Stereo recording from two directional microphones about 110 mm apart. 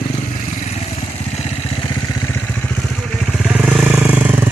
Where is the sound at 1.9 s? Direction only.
35° left (ahead or behind).